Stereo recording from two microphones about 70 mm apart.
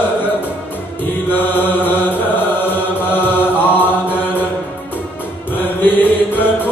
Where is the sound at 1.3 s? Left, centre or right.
Left.